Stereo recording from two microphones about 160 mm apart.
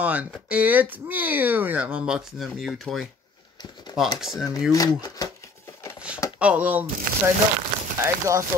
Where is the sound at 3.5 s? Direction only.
25° left (ahead or behind).